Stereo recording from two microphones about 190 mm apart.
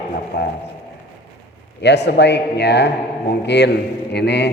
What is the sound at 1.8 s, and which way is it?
A man's voice, 65° left (ahead or behind).